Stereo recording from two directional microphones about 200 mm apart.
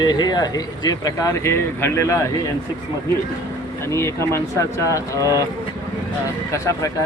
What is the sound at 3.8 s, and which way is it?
Speech, 15° left (ahead or behind).